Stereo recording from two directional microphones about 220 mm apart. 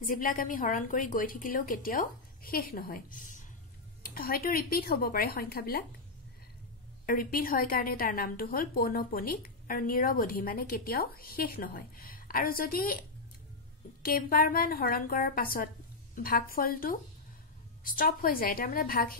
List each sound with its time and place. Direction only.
0.0 s a woman's voice: 40° left (ahead or behind)
7.1 s a woman's voice: 40° left (ahead or behind)
14.0 s a woman's voice: 40° left (ahead or behind)